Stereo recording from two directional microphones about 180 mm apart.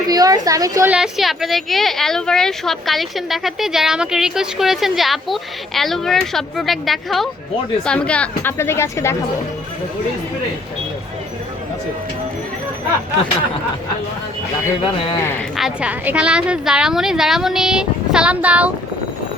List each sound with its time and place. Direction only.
0.1 s a child's voice: 20° right (ahead or behind)
0.9 s a woman's voice: 5° right (ahead or behind); by 9.1 s 15° left (ahead or behind)
15.5 s speech: 5° right (ahead or behind)